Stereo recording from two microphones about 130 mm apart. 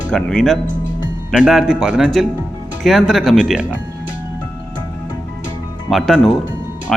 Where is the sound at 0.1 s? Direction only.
5° left (ahead or behind).